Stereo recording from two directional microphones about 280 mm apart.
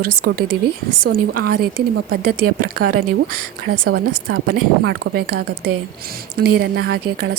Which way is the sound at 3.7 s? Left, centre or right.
Right.